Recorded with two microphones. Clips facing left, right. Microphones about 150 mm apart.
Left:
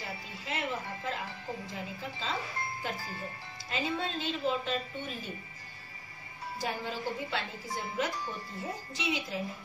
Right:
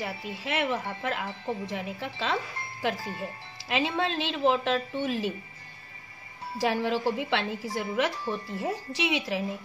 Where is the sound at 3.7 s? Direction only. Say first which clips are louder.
Right 6 dB; 80° right.